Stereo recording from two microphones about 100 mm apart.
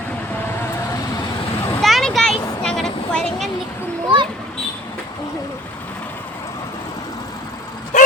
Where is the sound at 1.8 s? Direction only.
Centre (ahead or behind).